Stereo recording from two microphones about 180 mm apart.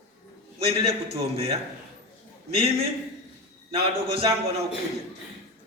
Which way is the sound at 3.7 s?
30° right (ahead or behind).